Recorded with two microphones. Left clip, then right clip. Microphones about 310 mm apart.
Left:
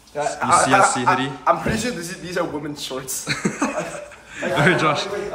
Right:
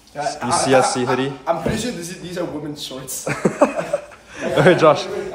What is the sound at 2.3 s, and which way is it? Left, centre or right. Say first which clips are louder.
Speech: left 2 dB; centre.